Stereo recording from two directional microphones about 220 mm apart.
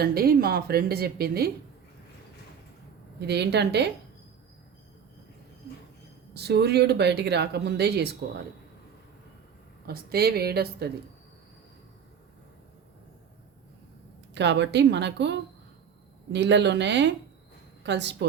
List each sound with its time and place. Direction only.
0.0 s speech: 45° right (ahead or behind)
3.2 s speech: 50° right (ahead or behind)
6.3 s speech: 50° right (ahead or behind)
9.8 s speech: 45° right (ahead or behind)
14.3 s speech: 50° right (ahead or behind)